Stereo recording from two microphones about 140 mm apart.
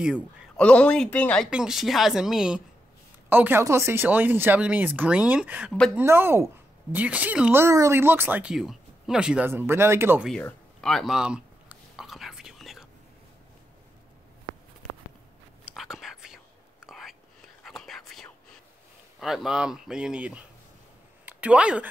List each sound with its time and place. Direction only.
0.6 s speech: 10° left (ahead or behind)
1.5 s a woman's voice: 5° right (ahead or behind)
7.6 s speech: 20° right (ahead or behind)
9.5 s speech: 15° right (ahead or behind)
10.3 s a sound: 5° left (ahead or behind)
15.7 s whispering: centre (ahead or behind)
19.1 s speech: centre (ahead or behind)